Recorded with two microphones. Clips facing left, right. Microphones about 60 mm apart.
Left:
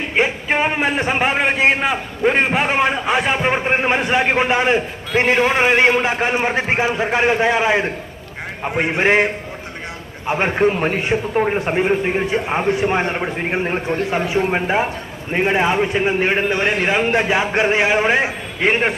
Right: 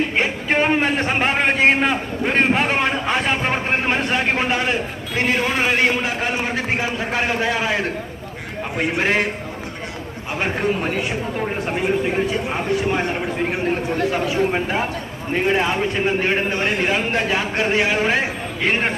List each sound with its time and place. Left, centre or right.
0.2 s a man's voice: centre